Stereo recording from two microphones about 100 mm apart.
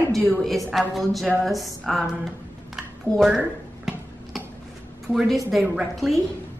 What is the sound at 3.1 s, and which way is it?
Speech, 5° right (ahead or behind).